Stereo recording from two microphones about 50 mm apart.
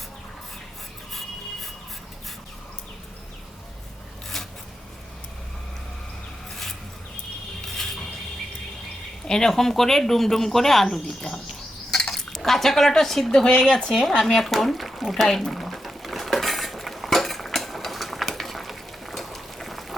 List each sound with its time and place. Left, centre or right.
9.2 s speech: centre
11.9 s cutlery: centre
13.7 s speech: centre
13.9 s a sound: centre